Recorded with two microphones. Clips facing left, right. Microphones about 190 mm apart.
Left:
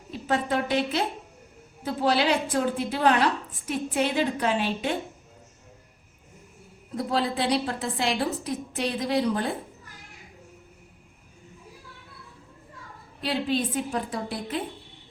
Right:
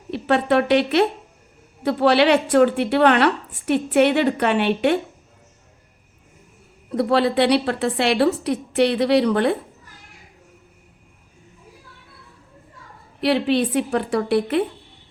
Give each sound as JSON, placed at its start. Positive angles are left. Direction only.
{"t": 0.1, "sound": "a woman's voice", "side_deg": -70}
{"t": 6.9, "sound": "a woman's voice", "side_deg": -70}
{"t": 13.2, "sound": "a woman's voice", "side_deg": -70}